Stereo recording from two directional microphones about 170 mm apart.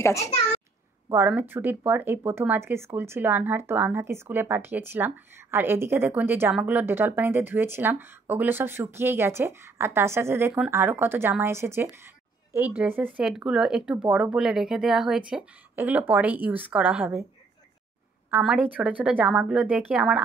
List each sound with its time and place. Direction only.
0.0 s a child's voice: 15° left (ahead or behind)
1.1 s speech: 15° right (ahead or behind)
18.4 s speech: 10° right (ahead or behind)